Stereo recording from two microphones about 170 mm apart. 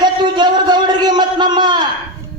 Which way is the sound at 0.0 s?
25° right (ahead or behind).